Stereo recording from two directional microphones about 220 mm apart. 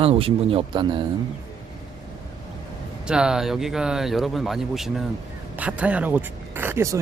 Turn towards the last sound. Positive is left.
turn(degrees=-10)  # may be behind; listen again after turning